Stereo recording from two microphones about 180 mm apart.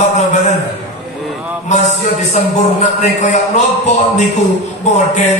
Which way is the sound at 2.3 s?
40° left (ahead or behind).